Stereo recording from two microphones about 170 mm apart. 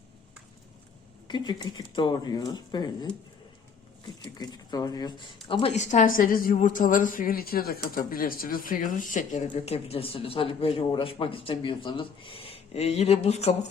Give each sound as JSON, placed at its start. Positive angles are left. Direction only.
{"t": 1.3, "sound": "speech", "side_deg": 25}
{"t": 4.4, "sound": "speech", "side_deg": 25}
{"t": 9.7, "sound": "speech", "side_deg": 35}